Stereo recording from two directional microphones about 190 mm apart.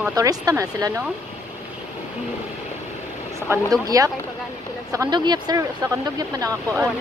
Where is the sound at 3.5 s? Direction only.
15° right (ahead or behind).